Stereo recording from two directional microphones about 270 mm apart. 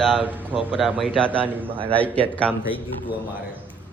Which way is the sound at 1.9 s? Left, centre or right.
Centre.